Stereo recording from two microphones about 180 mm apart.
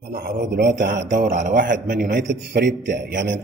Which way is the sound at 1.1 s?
45° right (ahead or behind).